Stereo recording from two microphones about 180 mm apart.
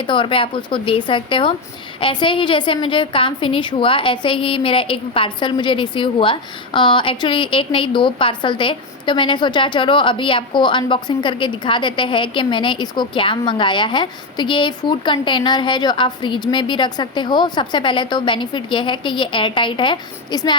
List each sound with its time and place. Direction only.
0.0 s a woman's voice: 25° left (ahead or behind)